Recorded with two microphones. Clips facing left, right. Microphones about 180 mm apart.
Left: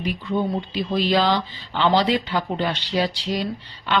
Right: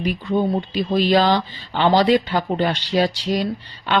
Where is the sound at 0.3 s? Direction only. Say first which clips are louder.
Right 4 dB; 45° right (ahead or behind).